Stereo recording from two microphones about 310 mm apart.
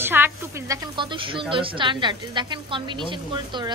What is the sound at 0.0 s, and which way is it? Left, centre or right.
A woman's voice, centre.